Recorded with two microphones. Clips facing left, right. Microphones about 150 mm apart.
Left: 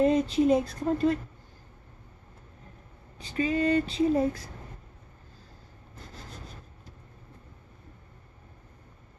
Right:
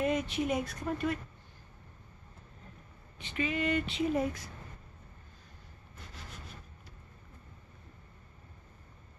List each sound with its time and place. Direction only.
0.0 s speech: 30° left (ahead or behind)
3.2 s speech: 35° left (ahead or behind)